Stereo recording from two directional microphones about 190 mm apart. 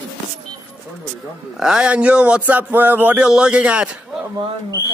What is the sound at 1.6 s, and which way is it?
Speech, 5° right (ahead or behind).